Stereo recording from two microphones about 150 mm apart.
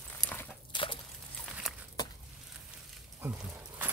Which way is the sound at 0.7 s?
35° left (ahead or behind).